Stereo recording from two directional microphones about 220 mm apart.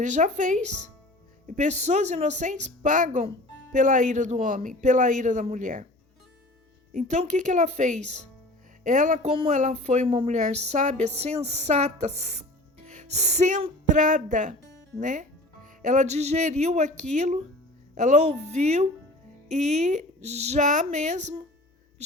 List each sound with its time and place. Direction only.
0.0 s a woman's voice: 35° right (ahead or behind)
6.9 s a woman's voice: 30° right (ahead or behind)